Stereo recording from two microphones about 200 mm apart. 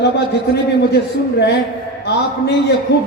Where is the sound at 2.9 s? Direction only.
60° left (ahead or behind).